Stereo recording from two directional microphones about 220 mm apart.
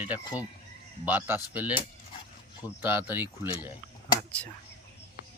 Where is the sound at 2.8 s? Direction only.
10° right (ahead or behind).